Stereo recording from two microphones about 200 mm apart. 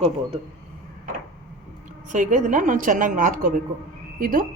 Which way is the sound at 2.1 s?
40° right (ahead or behind).